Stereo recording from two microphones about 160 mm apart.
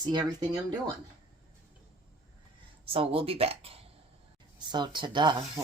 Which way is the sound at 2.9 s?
35° right (ahead or behind).